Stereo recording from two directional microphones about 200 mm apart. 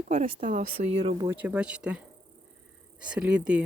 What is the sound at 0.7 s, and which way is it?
Speech, 30° right (ahead or behind).